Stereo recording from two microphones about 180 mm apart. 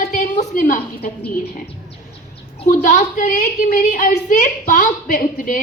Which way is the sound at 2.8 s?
45° left (ahead or behind).